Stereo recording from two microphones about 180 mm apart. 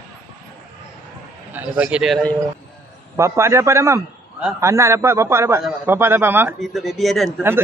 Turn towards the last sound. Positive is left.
turn(degrees=0)  # may be behind; listen again after turning